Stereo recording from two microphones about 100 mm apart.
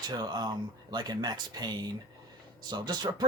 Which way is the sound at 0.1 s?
45° right (ahead or behind).